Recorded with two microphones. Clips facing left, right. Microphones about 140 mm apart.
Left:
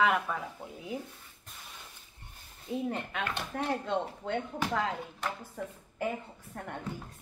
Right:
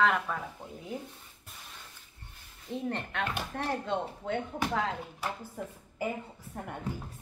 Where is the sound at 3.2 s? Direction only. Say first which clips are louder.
Right 1 dB; 10° right (ahead or behind).